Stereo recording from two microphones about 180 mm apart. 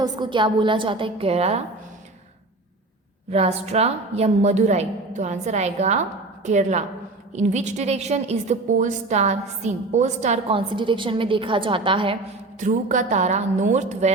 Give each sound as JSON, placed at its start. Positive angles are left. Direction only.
{"t": 0.0, "sound": "a woman's voice", "side_deg": -25}
{"t": 3.3, "sound": "a woman's voice", "side_deg": -35}
{"t": 10.8, "sound": "a woman's voice", "side_deg": -25}
{"t": 12.5, "sound": "a woman's voice", "side_deg": -45}